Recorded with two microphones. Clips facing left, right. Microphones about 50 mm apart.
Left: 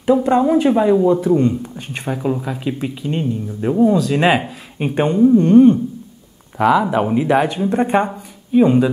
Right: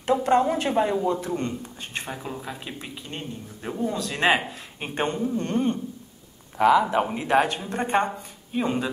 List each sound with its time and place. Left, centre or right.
0.2 s speech: centre